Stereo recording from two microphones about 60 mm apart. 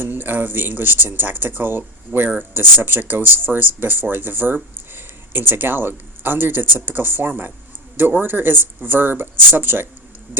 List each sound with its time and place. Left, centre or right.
0.0 s speech: right